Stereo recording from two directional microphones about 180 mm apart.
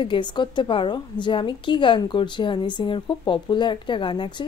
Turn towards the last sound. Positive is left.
turn(degrees=25)  # may be behind; listen again after turning